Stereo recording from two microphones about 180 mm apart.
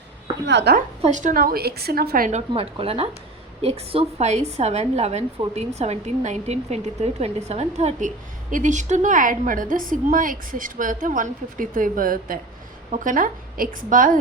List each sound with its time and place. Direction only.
0.4 s a woman's voice: 70° right (ahead or behind)
1.0 s speech: 45° right (ahead or behind)
2.5 s a woman's voice: 30° right (ahead or behind); by 14.2 s 50° right (ahead or behind)